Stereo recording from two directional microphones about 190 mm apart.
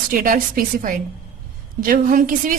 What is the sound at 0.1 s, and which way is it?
A woman's voice, 45° right (ahead or behind).